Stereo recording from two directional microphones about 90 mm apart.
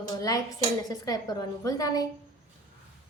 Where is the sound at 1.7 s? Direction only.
40° left (ahead or behind).